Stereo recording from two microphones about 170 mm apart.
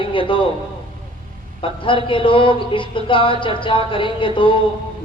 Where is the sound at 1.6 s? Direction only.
30° left (ahead or behind).